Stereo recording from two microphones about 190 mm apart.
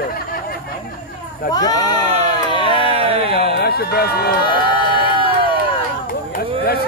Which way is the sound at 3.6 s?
55° left (ahead or behind).